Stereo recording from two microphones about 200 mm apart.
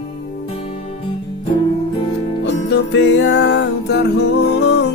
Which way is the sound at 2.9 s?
65° left (ahead or behind).